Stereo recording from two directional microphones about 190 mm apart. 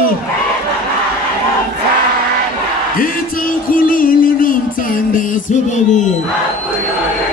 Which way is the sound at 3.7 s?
50° left (ahead or behind).